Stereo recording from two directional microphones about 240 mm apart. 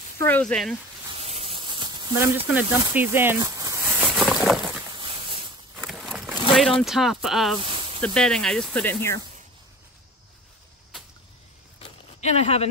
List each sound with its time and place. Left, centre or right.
0.2 s speech: centre
1.1 s snake: right; by 4.8 s centre
4.9 s a sound: right
5.8 s a sound: centre
6.8 s speech: centre
7.5 s snake: right
8.0 s speech: centre
12.2 s speech: left